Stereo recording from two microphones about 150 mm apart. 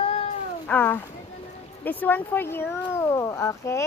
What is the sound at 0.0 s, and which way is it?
Cat, 40° left (ahead or behind).